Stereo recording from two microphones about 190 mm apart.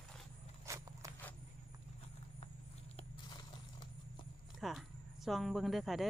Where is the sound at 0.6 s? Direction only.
15° right (ahead or behind).